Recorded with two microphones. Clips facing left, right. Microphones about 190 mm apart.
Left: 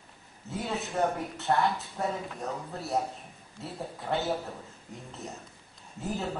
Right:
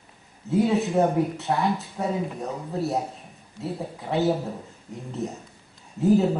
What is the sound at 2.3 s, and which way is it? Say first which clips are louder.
Speech: right 4 dB; 20° right (ahead or behind).